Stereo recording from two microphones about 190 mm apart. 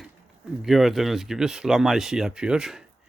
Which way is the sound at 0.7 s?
Centre (ahead or behind).